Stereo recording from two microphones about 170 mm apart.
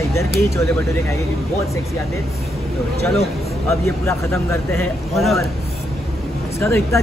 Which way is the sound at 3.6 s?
15° left (ahead or behind).